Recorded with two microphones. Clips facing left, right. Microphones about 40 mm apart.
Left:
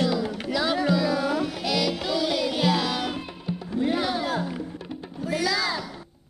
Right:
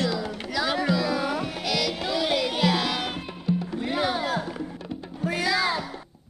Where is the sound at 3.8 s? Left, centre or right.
Centre.